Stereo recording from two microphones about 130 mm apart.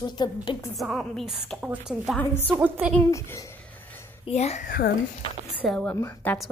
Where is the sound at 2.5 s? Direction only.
10° right (ahead or behind).